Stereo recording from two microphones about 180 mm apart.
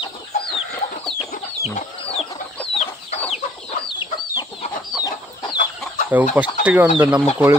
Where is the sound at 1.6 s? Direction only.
35° left (ahead or behind).